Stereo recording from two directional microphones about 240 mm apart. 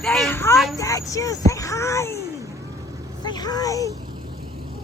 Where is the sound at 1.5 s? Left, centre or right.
Centre.